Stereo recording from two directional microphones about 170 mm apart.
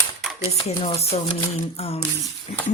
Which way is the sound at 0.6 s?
35° left (ahead or behind).